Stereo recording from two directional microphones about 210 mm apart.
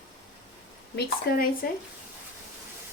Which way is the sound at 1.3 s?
50° left (ahead or behind).